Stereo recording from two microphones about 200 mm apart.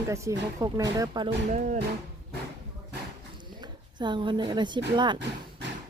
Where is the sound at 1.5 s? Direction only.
40° right (ahead or behind).